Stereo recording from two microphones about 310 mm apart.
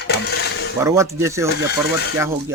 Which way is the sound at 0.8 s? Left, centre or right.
Centre.